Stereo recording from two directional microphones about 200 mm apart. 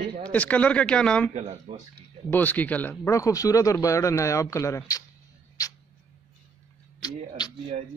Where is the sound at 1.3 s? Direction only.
35° right (ahead or behind).